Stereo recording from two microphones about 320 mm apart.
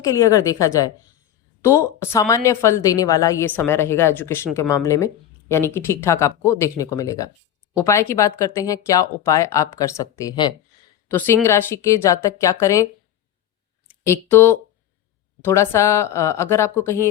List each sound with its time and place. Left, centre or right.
0.0 s a woman's voice: centre
14.0 s a woman's voice: centre